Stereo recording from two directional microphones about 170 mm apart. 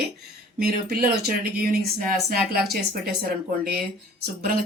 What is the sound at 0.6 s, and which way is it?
Speech, 65° right (ahead or behind).